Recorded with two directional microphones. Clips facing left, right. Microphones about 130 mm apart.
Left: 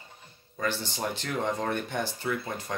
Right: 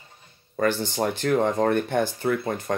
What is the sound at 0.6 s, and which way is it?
Speech, 55° right (ahead or behind).